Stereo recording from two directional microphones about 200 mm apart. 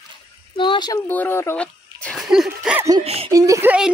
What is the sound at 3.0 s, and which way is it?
Speech, 30° right (ahead or behind).